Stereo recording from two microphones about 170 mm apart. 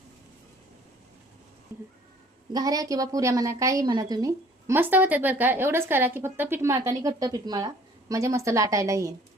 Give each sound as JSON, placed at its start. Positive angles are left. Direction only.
{"t": 2.5, "sound": "a woman's voice", "side_deg": -20}